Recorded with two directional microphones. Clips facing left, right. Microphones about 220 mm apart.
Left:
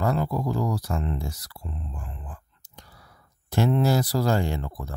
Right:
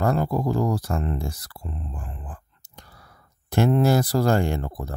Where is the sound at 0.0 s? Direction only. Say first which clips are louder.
Right 3 dB; 50° right (ahead or behind).